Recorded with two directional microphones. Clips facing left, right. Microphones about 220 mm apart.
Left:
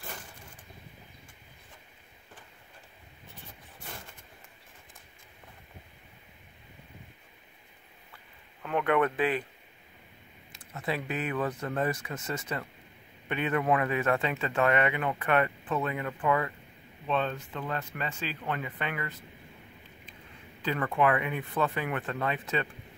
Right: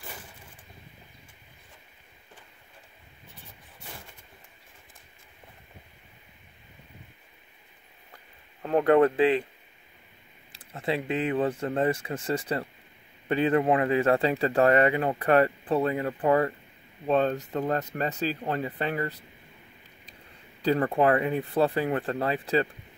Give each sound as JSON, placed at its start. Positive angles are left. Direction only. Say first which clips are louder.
{"t": 8.6, "sound": "speech", "louder": "right 7 dB", "side_deg": -35}
{"t": 10.5, "sound": "speech", "louder": "right 4 dB", "side_deg": -30}
{"t": 20.6, "sound": "speech", "louder": "right 5 dB", "side_deg": -35}